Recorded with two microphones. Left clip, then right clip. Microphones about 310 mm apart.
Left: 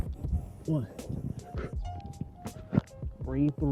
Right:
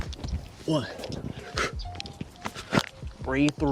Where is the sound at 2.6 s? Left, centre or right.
Centre.